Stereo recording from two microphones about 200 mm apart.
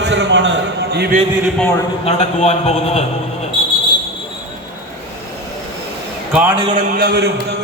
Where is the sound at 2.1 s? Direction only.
35° left (ahead or behind).